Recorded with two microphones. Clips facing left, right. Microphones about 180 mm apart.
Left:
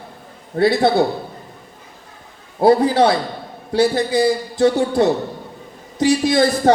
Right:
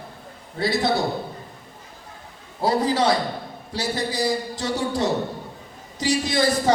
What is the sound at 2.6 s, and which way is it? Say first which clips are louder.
A man's voice: left 8 dB; 55° left (ahead or behind).